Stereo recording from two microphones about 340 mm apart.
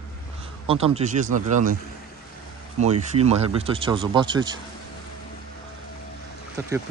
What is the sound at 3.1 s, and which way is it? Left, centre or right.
Speech, centre.